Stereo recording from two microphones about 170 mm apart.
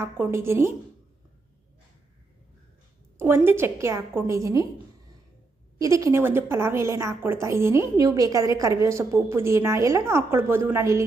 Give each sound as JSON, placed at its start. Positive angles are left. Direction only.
{"t": 0.0, "sound": "a woman's voice", "side_deg": -15}
{"t": 3.2, "sound": "a woman's voice", "side_deg": -15}
{"t": 5.8, "sound": "a woman's voice", "side_deg": -20}